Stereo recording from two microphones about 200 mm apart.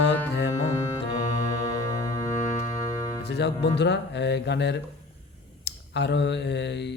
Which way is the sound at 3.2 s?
55° left (ahead or behind).